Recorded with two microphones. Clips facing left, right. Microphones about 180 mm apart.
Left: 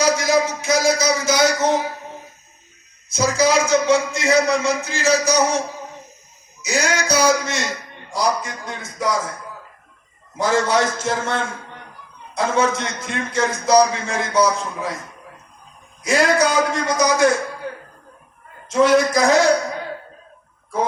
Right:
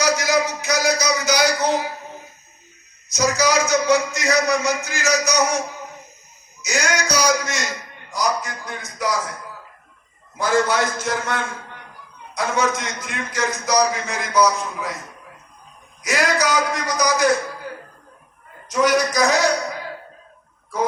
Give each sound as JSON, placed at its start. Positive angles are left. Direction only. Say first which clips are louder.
{"t": 0.0, "sound": "a sound", "louder": "left 2 dB", "side_deg": 25}
{"t": 3.1, "sound": "a man's voice", "louder": "left 2 dB", "side_deg": 30}
{"t": 8.6, "sound": "a man's voice", "louder": "left 3 dB", "side_deg": 25}
{"t": 10.3, "sound": "a man's voice", "louder": "left 1 dB", "side_deg": 25}
{"t": 16.0, "sound": "a man's voice", "louder": "left 4 dB", "side_deg": 25}
{"t": 18.7, "sound": "a man's voice", "louder": "left 4 dB", "side_deg": 25}